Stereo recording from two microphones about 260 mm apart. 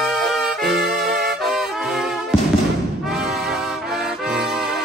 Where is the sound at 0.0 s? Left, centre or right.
Centre.